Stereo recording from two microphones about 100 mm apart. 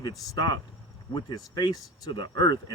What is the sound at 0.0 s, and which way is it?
Speech, 50° left (ahead or behind).